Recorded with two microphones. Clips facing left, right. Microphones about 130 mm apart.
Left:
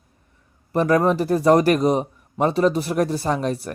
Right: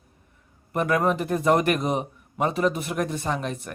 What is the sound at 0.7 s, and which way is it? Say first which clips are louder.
A man's voice: left 5 dB; 35° left (ahead or behind).